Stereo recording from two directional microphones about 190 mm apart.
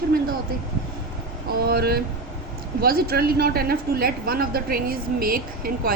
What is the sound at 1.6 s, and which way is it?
A woman's voice, 55° right (ahead or behind).